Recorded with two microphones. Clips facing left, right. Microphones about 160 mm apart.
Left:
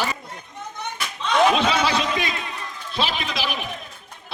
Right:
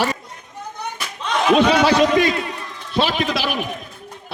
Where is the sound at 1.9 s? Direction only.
45° right (ahead or behind).